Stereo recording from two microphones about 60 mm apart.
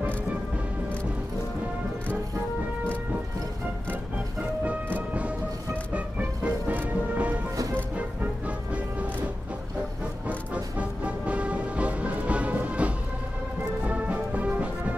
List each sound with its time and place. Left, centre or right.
3.9 s music: right
10.2 s music: right